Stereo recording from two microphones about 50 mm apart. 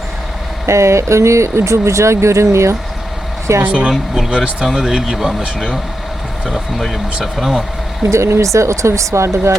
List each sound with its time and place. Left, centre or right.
0.6 s speech: right
3.6 s speech: right; by 5.4 s centre
6.4 s speech: centre
8.1 s speech: right